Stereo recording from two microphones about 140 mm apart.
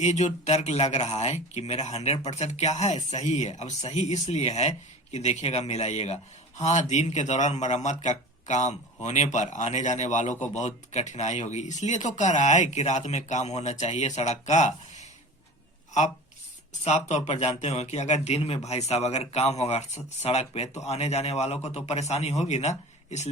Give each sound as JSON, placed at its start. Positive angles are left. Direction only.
{"t": 0.0, "sound": "speech", "side_deg": 55}
{"t": 16.8, "sound": "speech", "side_deg": 50}